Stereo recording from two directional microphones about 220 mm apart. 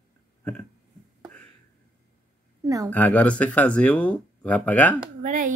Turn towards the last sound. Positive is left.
turn(degrees=-35)  # may be behind; listen again after turning